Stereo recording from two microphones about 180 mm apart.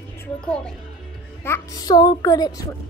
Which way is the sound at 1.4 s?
15° left (ahead or behind).